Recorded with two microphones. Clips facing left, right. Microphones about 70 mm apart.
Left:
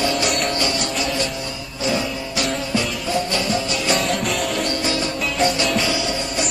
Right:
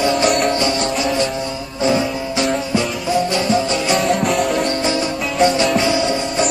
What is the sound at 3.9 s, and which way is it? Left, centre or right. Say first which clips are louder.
Music: right 5 dB; centre.